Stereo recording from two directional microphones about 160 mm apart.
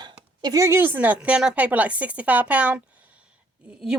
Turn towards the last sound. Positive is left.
turn(degrees=-5)  # may be behind; listen again after turning